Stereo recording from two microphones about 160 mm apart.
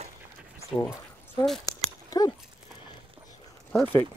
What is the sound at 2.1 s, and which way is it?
Speech, 20° left (ahead or behind).